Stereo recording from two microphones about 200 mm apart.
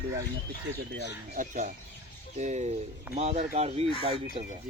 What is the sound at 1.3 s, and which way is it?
Speech, 40° right (ahead or behind).